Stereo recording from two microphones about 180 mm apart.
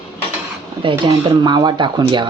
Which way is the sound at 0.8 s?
30° right (ahead or behind).